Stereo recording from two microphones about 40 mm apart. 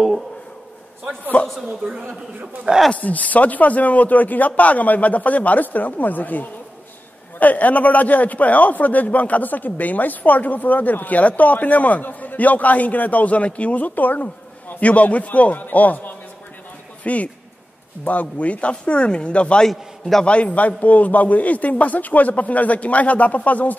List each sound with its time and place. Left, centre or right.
1.4 s a woman's voice: left
1.8 s speech: right
2.7 s speech: right
3.0 s a man's voice: left
19.7 s a man's voice: centre
20.5 s a man's voice: left